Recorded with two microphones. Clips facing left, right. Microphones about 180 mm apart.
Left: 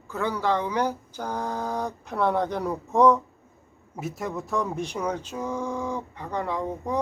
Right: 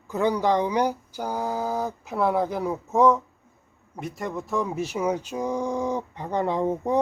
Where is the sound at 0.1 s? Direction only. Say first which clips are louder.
Right 4 dB; 15° right (ahead or behind).